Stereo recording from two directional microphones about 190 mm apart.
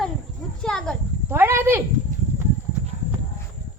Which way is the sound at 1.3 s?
15° right (ahead or behind).